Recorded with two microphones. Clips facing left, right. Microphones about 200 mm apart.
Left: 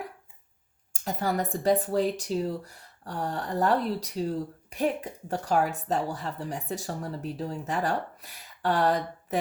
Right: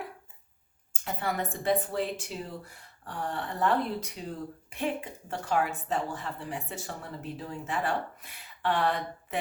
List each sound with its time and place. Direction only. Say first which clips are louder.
1.0 s speech: left 4 dB; 40° left (ahead or behind)